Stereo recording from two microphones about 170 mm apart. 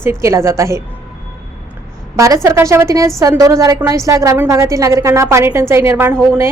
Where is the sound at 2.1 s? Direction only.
20° right (ahead or behind).